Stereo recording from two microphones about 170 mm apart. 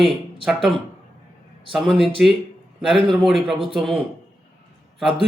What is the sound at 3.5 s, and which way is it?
Speech, 30° right (ahead or behind).